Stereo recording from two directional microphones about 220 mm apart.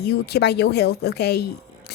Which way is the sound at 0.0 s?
45° left (ahead or behind).